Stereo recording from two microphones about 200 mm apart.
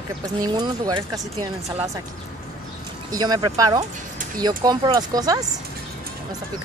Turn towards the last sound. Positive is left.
turn(degrees=-20)  # may be behind; listen again after turning